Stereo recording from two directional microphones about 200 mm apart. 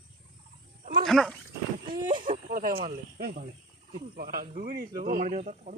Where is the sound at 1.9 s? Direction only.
45° right (ahead or behind).